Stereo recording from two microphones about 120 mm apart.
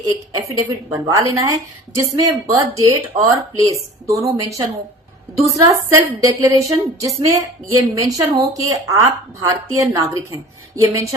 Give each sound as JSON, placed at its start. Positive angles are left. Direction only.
{"t": 0.0, "sound": "a woman's voice", "side_deg": -25}